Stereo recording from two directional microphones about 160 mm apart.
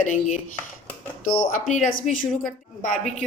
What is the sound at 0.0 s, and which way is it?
A woman's voice, 55° left (ahead or behind).